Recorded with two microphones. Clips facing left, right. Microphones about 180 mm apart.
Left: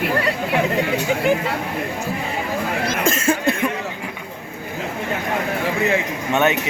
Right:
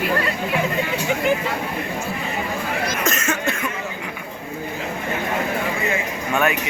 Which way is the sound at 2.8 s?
30° left (ahead or behind).